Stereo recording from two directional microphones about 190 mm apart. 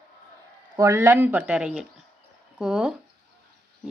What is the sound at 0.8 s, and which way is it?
Speech, 15° right (ahead or behind).